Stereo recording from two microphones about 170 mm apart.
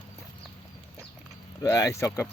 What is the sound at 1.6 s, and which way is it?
Speech, 20° left (ahead or behind).